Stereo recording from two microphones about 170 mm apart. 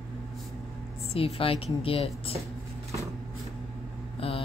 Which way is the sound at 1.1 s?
35° left (ahead or behind).